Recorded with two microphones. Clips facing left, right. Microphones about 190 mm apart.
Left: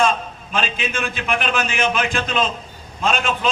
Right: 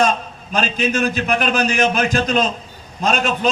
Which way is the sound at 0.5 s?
40° right (ahead or behind).